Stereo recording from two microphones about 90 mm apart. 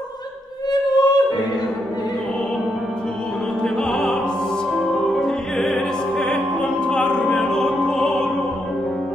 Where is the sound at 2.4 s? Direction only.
5° left (ahead or behind).